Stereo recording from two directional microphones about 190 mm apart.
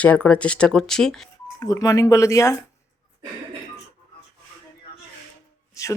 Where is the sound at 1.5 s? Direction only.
20° left (ahead or behind).